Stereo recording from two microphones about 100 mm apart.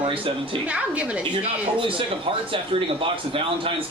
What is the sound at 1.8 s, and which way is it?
A man's voice, 60° right (ahead or behind).